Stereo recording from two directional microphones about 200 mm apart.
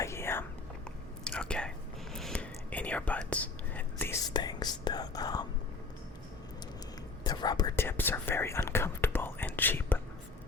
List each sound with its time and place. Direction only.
0.0 s whispering: 15° left (ahead or behind)
4.4 s whispering: 20° left (ahead or behind)
7.3 s whispering: 20° left (ahead or behind)